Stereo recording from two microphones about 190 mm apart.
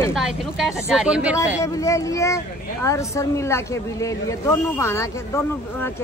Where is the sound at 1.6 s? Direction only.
15° left (ahead or behind).